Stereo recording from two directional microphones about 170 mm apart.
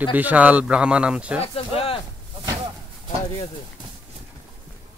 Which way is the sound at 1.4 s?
35° left (ahead or behind).